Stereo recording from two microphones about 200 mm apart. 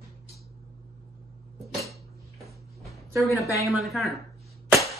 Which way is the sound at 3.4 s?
15° left (ahead or behind).